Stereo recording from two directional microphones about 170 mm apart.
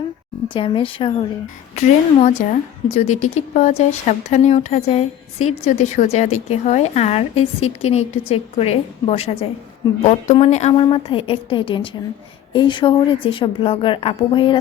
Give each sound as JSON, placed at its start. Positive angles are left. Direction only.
{"t": 0.4, "sound": "a woman's voice", "side_deg": 30}
{"t": 1.7, "sound": "speech", "side_deg": 40}
{"t": 9.8, "sound": "a woman's voice", "side_deg": 25}
{"t": 10.3, "sound": "a woman's voice", "side_deg": 40}